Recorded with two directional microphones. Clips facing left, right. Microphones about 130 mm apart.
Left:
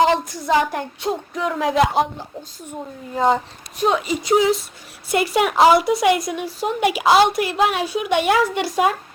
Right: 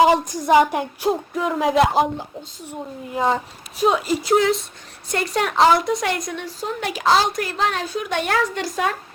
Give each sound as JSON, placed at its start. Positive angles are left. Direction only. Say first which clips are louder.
{"t": 0.0, "sound": "a woman's voice", "louder": "right 2 dB", "side_deg": -15}
{"t": 3.2, "sound": "a woman's voice", "louder": "left 3 dB", "side_deg": 0}